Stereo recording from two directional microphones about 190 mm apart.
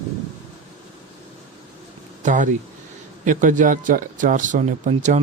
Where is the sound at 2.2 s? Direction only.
40° right (ahead or behind).